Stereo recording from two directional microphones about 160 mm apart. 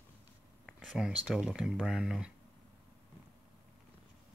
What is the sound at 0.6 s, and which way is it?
Speech, centre (ahead or behind).